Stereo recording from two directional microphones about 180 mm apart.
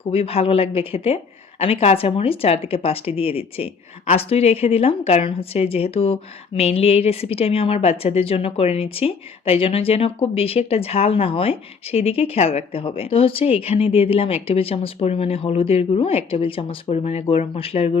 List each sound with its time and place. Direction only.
0.1 s a woman's voice: 35° left (ahead or behind)